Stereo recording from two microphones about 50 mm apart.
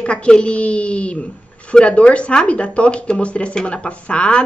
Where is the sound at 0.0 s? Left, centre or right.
Left.